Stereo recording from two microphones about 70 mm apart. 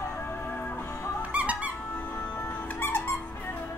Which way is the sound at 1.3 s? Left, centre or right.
Centre.